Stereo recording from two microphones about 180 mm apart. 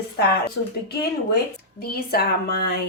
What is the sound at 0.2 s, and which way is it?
Speech, 65° left (ahead or behind).